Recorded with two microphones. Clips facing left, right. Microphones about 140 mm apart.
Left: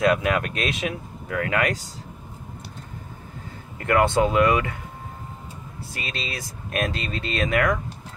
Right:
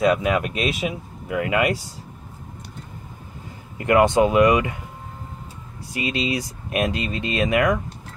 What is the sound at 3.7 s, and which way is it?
Speech, 15° right (ahead or behind).